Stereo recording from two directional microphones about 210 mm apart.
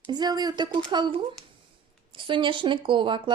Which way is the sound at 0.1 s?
20° right (ahead or behind).